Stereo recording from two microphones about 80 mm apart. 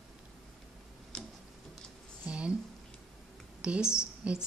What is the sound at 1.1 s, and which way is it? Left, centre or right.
Tick-tock, centre.